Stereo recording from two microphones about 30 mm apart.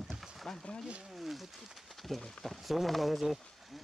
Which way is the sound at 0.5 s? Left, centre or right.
Centre.